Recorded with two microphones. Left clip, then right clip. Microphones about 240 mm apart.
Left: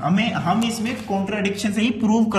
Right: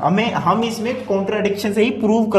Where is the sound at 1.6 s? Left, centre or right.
Centre.